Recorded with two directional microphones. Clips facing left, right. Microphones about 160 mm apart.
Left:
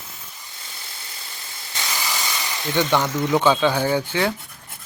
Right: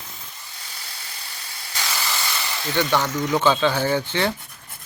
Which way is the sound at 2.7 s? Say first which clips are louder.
Left 1 dB; 15° left (ahead or behind).